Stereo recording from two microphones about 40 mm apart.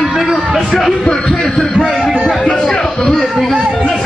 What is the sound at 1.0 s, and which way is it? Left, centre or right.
Speech, centre.